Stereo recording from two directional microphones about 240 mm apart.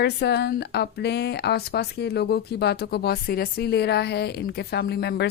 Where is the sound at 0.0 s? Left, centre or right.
Left.